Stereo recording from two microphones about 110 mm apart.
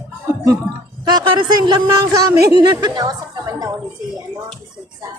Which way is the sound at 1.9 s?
25° right (ahead or behind).